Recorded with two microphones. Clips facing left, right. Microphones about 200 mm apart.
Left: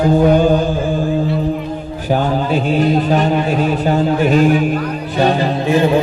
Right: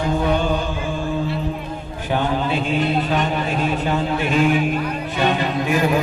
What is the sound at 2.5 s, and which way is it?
A man's voice, 40° left (ahead or behind).